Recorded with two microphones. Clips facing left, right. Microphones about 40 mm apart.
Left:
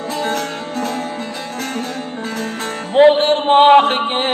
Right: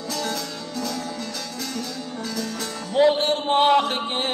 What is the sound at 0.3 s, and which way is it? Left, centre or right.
Music, left.